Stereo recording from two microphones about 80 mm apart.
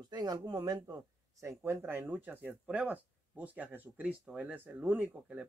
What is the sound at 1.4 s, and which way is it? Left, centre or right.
Speech, right.